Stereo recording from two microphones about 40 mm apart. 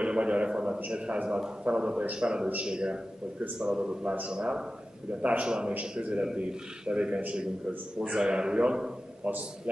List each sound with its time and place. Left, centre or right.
0.0 s a man's voice: right
5.2 s a man's voice: right